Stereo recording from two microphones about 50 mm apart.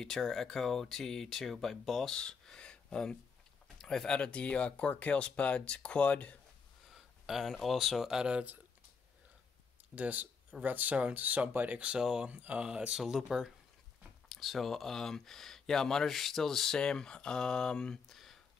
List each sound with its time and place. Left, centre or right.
0.0 s speech: centre
2.1 s a sound: centre
3.7 s speech: centre; by 6.3 s left
6.9 s a sound: centre
7.4 s speech: centre
8.1 s speech: centre
9.9 s speech: right
12.0 s speech: centre
12.3 s speech: right
12.5 s speech: right; by 18.1 s centre
18.1 s a sound: centre